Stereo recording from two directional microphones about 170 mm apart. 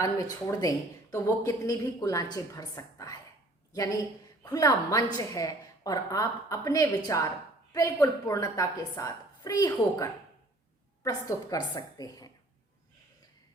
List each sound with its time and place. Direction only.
0.0 s a woman's voice: 20° left (ahead or behind)